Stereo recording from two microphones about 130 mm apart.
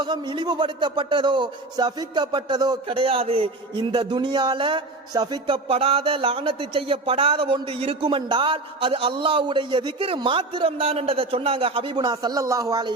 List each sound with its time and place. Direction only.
0.0 s a man's voice: 35° right (ahead or behind)